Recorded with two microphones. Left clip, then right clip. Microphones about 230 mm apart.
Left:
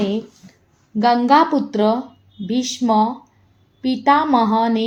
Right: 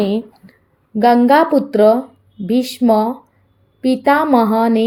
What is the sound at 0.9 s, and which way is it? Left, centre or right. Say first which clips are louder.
A woman's voice: right 3 dB; right.